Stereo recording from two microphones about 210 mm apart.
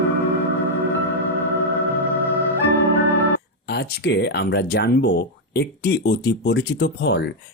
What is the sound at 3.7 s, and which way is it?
Speech, 50° left (ahead or behind).